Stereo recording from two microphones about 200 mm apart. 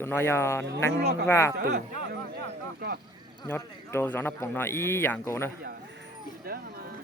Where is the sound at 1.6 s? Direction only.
55° right (ahead or behind).